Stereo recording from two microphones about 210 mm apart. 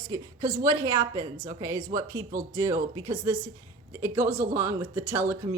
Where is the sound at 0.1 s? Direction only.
20° right (ahead or behind).